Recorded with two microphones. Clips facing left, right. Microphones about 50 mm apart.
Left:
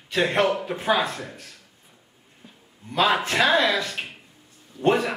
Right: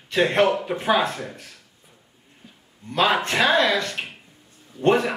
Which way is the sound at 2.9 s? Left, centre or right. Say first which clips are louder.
Right 1 dB; centre.